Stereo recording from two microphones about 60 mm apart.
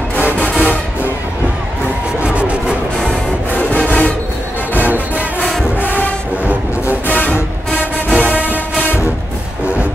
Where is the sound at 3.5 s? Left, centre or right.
Left.